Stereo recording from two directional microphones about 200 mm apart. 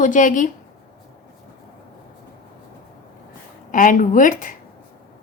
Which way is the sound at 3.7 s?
40° left (ahead or behind).